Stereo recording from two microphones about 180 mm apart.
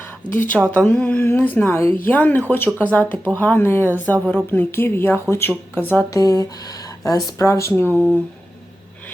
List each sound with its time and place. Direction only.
0.7 s speech: 5° left (ahead or behind)